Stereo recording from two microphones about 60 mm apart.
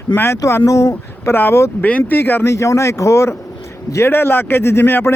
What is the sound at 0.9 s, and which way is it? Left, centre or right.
Speech, left.